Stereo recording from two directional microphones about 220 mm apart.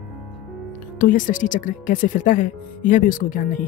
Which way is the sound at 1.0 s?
40° left (ahead or behind).